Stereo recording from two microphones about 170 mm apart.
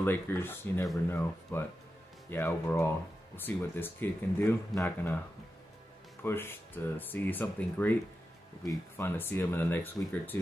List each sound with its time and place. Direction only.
0.0 s speech: 15° left (ahead or behind)
6.2 s speech: 15° left (ahead or behind)